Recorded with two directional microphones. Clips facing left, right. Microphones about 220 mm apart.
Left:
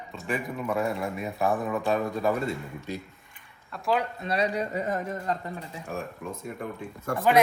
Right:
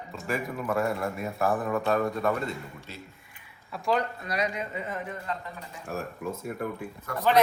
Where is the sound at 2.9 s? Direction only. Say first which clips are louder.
Left 13 dB; 15° left (ahead or behind).